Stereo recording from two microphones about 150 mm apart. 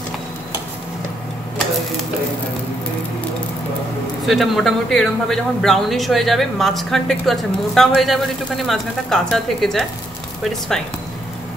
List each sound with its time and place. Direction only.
4.3 s speech: centre (ahead or behind)